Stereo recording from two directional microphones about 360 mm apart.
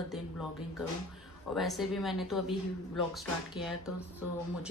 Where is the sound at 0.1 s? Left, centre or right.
Centre.